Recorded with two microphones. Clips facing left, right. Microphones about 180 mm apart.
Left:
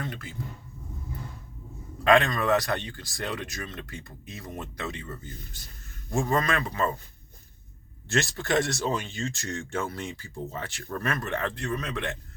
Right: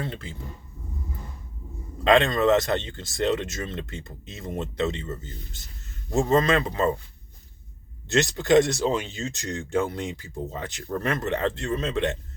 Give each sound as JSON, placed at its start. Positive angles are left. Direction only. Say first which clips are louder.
{"t": 0.0, "sound": "speech", "louder": "right 3 dB", "side_deg": -25}
{"t": 2.0, "sound": "speech", "louder": "right 3 dB", "side_deg": -25}
{"t": 8.1, "sound": "speech", "louder": "right 7 dB", "side_deg": -20}